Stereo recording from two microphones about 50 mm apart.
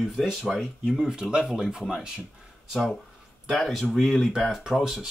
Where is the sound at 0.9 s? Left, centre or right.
Centre.